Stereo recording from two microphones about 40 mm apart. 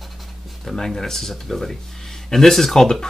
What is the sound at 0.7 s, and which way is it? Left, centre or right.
Speech, centre.